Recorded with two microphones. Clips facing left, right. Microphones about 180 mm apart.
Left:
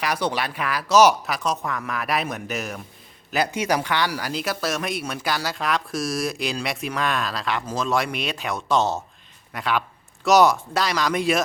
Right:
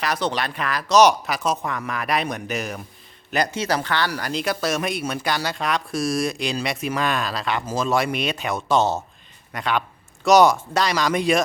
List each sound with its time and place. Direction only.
0.0 s speech: 10° left (ahead or behind)